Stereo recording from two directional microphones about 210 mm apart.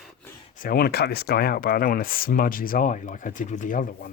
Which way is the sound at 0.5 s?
45° left (ahead or behind).